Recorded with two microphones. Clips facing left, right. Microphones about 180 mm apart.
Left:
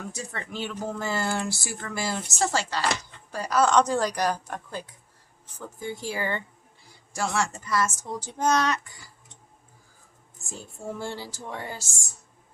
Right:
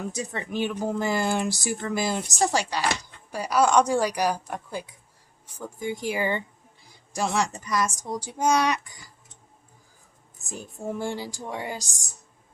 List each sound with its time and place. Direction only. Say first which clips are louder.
0.1 s speech: right 5 dB; 15° right (ahead or behind)
10.5 s speech: right 3 dB; 15° right (ahead or behind)